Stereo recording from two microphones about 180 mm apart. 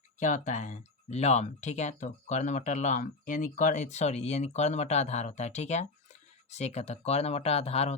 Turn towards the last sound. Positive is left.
turn(degrees=35)  # may be behind; listen again after turning